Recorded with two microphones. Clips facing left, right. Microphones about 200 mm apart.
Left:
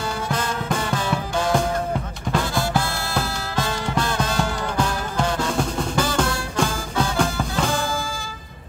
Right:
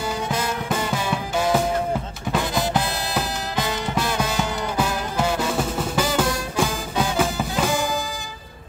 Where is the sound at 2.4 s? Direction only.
20° right (ahead or behind).